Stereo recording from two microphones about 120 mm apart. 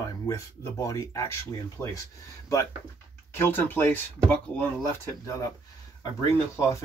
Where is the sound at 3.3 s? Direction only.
20° left (ahead or behind).